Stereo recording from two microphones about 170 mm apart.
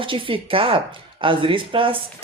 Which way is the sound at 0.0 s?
30° right (ahead or behind).